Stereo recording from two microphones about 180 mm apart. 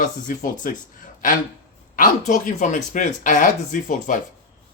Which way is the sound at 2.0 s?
45° left (ahead or behind).